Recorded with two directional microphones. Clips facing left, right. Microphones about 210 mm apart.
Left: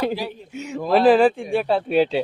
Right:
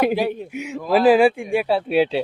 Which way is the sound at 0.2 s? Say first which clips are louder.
Right 8 dB; 60° right (ahead or behind).